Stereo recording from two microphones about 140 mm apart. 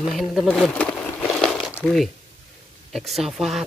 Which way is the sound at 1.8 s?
Centre (ahead or behind).